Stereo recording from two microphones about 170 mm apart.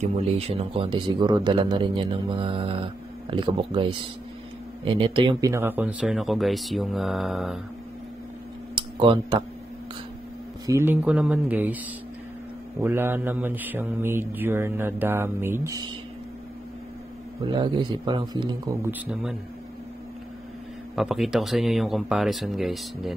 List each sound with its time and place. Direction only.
0.0 s a man's voice: 35° right (ahead or behind)
5.5 s speech: 10° right (ahead or behind)
8.7 s a sound: 30° right (ahead or behind)
10.7 s mantra: 10° right (ahead or behind)
12.8 s mantra: 15° right (ahead or behind)
17.4 s a man's voice: 25° right (ahead or behind)
18.8 s mantra: 10° right (ahead or behind)
20.9 s speech: centre (ahead or behind)